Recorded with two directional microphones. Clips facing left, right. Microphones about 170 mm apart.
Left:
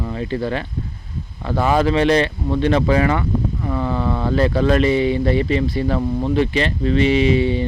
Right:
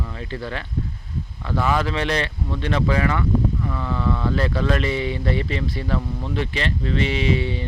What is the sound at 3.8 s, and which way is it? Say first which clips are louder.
Speech: left 4 dB; 45° left (ahead or behind).